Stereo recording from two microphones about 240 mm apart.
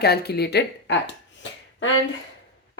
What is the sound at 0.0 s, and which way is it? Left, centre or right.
Speech, left.